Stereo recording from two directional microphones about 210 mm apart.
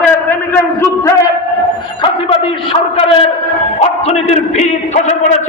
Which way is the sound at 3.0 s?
25° left (ahead or behind).